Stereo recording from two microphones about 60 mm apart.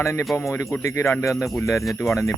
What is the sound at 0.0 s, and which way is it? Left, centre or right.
Speech, left.